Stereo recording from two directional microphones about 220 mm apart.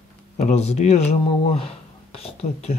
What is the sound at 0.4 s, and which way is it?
Speech, 30° left (ahead or behind).